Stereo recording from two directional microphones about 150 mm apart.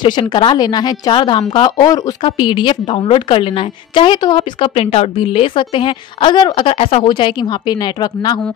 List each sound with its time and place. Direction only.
0.0 s a woman's voice: 30° left (ahead or behind)
7.1 s a woman's voice: 30° left (ahead or behind)